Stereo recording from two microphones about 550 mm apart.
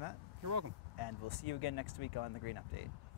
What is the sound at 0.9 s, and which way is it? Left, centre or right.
Speech, left.